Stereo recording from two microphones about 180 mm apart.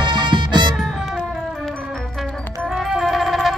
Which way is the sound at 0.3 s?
25° right (ahead or behind).